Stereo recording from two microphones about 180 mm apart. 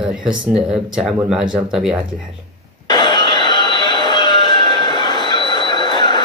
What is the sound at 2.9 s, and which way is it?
Music, 25° left (ahead or behind).